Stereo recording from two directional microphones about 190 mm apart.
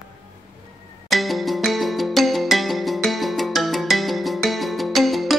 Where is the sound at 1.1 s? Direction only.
Centre (ahead or behind).